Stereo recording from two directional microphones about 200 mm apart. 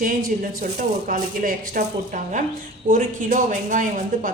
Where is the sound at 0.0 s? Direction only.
45° right (ahead or behind).